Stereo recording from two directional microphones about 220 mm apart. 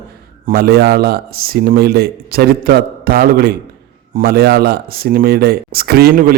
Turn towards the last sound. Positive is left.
turn(degrees=-40)  # may be behind; listen again after turning